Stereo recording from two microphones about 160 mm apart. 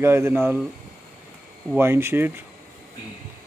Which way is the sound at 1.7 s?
15° right (ahead or behind).